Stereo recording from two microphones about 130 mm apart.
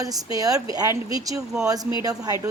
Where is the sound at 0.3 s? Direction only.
30° right (ahead or behind).